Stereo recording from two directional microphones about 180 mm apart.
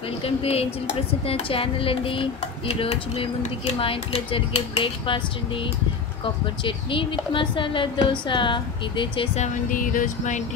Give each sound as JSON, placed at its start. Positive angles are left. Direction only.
{"t": 0.2, "sound": "a woman's voice", "side_deg": 30}